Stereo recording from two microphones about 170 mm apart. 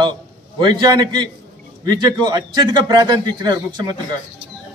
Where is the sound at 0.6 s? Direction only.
25° right (ahead or behind).